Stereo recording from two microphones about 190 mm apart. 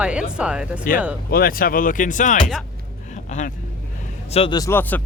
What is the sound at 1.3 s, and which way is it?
Speech, 50° left (ahead or behind).